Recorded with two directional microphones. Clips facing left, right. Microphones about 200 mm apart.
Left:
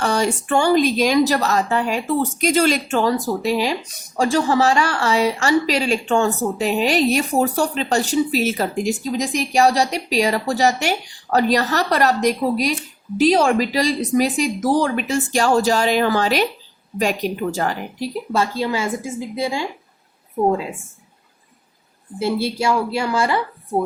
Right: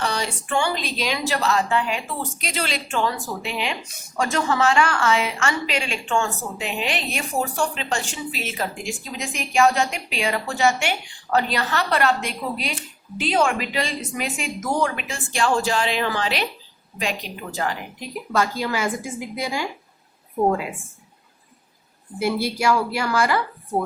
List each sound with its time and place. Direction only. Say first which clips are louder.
0.0 s a woman's voice: left 7 dB; 45° left (ahead or behind); by 19.6 s 25° left (ahead or behind)
22.2 s speech: left 2 dB; 25° left (ahead or behind)